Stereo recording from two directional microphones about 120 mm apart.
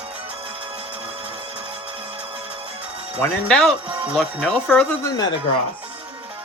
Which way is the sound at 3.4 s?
5° left (ahead or behind).